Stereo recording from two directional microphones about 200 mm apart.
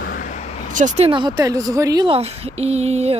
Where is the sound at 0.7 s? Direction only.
40° right (ahead or behind).